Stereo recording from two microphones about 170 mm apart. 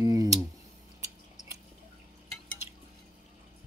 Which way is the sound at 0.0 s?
20° right (ahead or behind).